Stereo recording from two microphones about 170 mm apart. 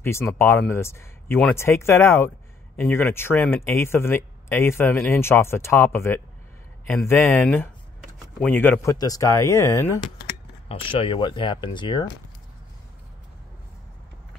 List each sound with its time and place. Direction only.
0.0 s speech: 15° left (ahead or behind)
8.0 s a sound: 5° left (ahead or behind)
8.9 s speech: 20° left (ahead or behind)
10.7 s speech: 30° left (ahead or behind)